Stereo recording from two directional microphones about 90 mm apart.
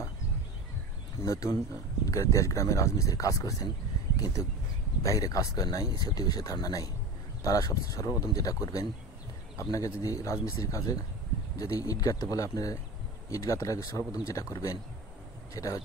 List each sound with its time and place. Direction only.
1.2 s speech: 35° left (ahead or behind)
9.6 s speech: 35° left (ahead or behind)